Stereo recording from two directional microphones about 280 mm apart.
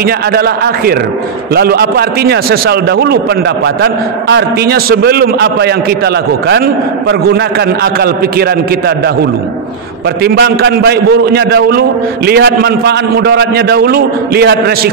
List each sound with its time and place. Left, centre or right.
0.0 s a man's voice: right